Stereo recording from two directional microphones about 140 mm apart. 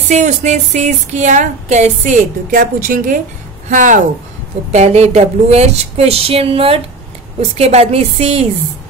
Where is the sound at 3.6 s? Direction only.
65° right (ahead or behind).